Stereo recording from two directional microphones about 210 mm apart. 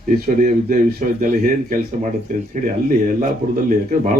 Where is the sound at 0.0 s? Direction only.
40° right (ahead or behind).